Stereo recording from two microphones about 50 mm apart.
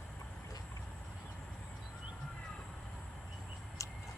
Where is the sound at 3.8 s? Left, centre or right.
Left.